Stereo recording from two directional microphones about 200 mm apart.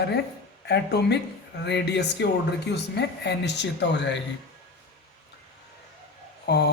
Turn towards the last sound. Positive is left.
turn(degrees=55)  # may be behind; listen again after turning